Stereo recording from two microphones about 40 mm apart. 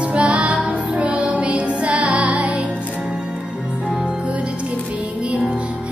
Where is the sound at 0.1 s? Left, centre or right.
Right.